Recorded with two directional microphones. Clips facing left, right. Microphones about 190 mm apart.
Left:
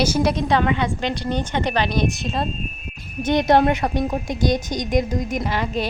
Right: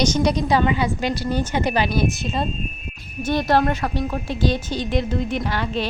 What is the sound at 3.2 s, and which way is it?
A woman's voice, 20° left (ahead or behind).